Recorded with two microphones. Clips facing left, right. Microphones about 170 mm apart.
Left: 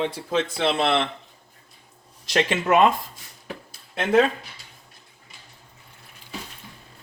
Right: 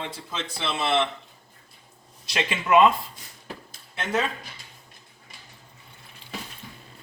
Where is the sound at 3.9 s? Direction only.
55° left (ahead or behind).